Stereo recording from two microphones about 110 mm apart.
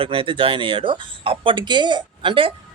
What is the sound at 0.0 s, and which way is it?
Speech, 55° right (ahead or behind).